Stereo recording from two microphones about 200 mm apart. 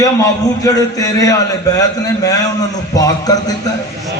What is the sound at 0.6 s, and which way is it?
Speech, 15° left (ahead or behind).